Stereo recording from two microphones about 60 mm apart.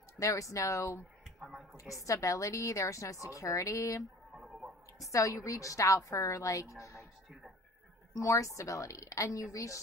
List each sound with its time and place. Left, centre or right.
0.2 s a woman's voice: left
1.4 s a woman's voice: centre
1.8 s a woman's voice: left
4.4 s fowl: centre
4.9 s a woman's voice: left
8.2 s a woman's voice: left